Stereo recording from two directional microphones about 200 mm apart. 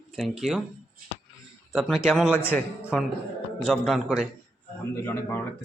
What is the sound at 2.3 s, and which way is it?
Speech, 10° left (ahead or behind).